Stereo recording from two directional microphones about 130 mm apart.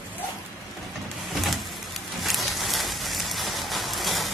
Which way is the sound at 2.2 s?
Centre (ahead or behind).